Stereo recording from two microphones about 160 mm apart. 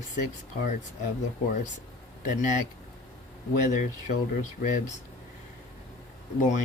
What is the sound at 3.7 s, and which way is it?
Speech, 50° left (ahead or behind).